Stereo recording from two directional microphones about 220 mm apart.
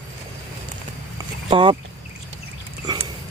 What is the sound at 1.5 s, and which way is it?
Speech, 25° right (ahead or behind).